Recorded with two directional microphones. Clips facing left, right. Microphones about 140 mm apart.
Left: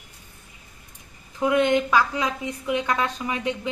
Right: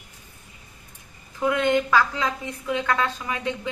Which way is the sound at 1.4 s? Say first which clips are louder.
Left 2 dB; 20° left (ahead or behind).